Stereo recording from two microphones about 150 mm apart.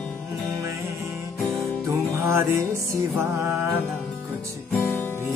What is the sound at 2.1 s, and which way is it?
Music, 20° right (ahead or behind).